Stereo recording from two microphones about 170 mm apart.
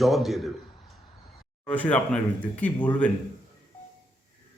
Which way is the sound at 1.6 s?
10° left (ahead or behind).